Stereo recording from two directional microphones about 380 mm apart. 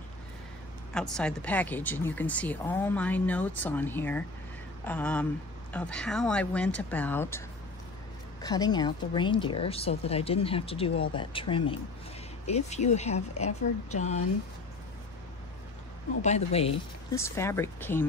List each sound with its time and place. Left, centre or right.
0.9 s speech: centre
16.2 s speech: centre